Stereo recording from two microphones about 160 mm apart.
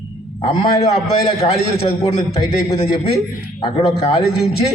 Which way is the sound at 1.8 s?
40° left (ahead or behind).